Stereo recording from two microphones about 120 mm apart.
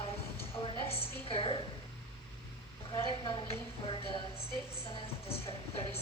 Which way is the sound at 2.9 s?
40° left (ahead or behind).